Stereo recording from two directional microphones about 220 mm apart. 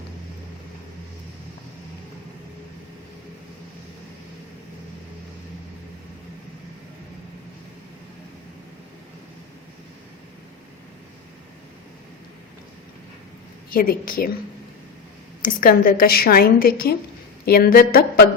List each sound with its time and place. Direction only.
13.7 s a woman's voice: 40° left (ahead or behind)
15.4 s a woman's voice: 40° left (ahead or behind)